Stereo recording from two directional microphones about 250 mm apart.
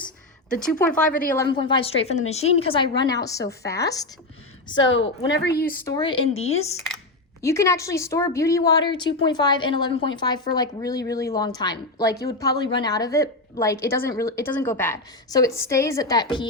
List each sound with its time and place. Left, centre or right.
0.8 s a woman's voice: centre
1.4 s a woman's voice: centre
4.7 s a woman's voice: left
5.8 s a woman's voice: centre
7.4 s a woman's voice: centre